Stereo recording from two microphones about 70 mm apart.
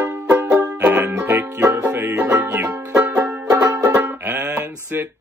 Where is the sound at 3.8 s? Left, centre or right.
Right.